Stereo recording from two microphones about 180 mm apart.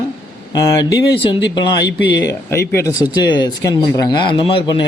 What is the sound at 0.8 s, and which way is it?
Speech, 25° left (ahead or behind).